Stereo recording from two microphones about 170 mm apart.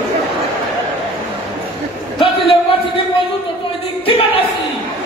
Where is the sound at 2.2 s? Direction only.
35° left (ahead or behind).